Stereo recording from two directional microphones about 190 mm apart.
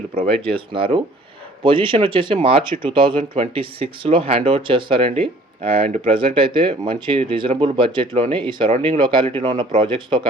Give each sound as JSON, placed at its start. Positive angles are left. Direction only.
{"t": 0.4, "sound": "speech", "side_deg": -30}